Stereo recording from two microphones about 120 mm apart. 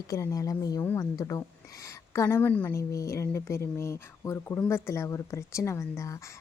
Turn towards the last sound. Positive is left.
turn(degrees=25)  # may be behind; listen again after turning